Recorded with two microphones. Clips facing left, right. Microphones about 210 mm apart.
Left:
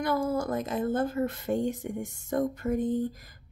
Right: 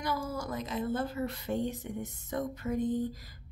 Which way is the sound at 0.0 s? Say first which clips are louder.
Left 7 dB; 55° left (ahead or behind).